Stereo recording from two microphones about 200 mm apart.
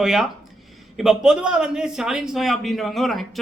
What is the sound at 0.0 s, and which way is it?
Speech, centre (ahead or behind).